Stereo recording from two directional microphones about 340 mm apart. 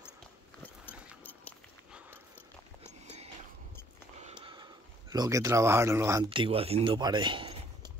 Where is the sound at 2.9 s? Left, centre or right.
Centre.